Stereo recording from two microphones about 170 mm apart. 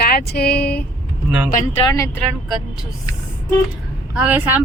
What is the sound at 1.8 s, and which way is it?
Speech, 20° left (ahead or behind).